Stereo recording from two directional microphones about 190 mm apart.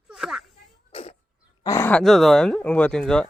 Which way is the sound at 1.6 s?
15° left (ahead or behind).